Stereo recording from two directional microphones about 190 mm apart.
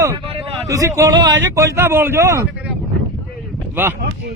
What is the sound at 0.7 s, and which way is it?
Speech, 15° right (ahead or behind).